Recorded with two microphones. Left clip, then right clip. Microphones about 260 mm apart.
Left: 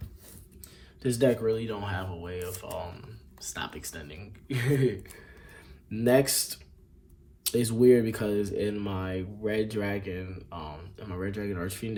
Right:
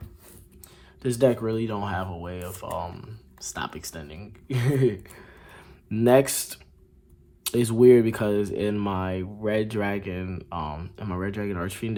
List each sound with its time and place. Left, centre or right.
1.0 s speech: centre
5.5 s a sound: right
7.4 s speech: right